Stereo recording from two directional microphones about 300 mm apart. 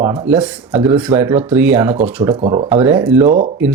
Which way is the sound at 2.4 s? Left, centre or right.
Centre.